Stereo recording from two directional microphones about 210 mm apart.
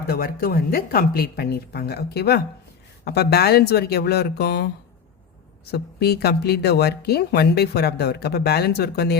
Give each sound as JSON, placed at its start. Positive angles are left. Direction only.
{"t": 0.1, "sound": "speech", "side_deg": 45}
{"t": 5.7, "sound": "speech", "side_deg": 50}